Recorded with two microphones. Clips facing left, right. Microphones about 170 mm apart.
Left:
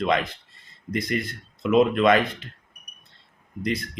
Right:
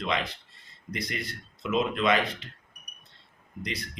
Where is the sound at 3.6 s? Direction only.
50° left (ahead or behind).